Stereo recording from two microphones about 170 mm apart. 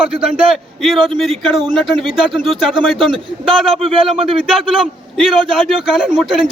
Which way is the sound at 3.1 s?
30° right (ahead or behind).